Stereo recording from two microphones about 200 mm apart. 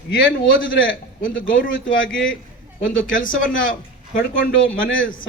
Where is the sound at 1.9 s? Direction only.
75° left (ahead or behind).